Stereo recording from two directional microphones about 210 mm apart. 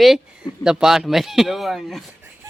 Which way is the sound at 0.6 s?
5° right (ahead or behind).